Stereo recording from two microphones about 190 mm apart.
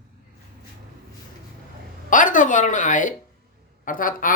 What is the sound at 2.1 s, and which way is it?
A woman's voice, 45° left (ahead or behind).